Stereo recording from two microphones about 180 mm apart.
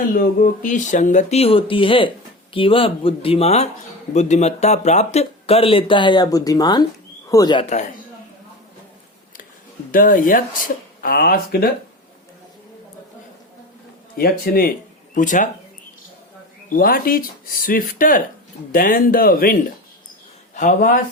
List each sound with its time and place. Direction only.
0.1 s speech: 50° left (ahead or behind); by 7.7 s 25° left (ahead or behind)
9.9 s speech: 50° left (ahead or behind)
14.2 s speech: 55° left (ahead or behind)
15.1 s speech: 45° left (ahead or behind)
16.6 s speech: 50° left (ahead or behind)